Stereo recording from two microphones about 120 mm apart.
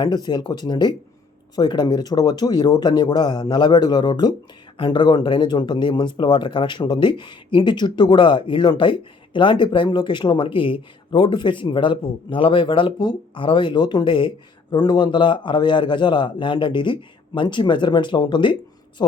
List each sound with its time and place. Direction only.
0.0 s speech: 35° left (ahead or behind)